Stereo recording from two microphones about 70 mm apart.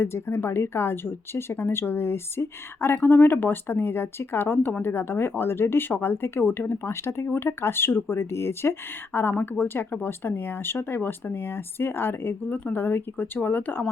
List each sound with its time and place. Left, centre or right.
0.0 s speech: left
9.3 s speech: left